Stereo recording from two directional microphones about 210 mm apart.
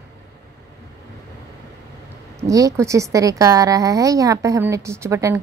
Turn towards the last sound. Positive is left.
turn(degrees=-15)  # may be behind; listen again after turning